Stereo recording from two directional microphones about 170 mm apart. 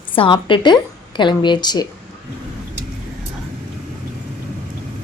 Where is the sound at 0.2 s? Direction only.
30° left (ahead or behind).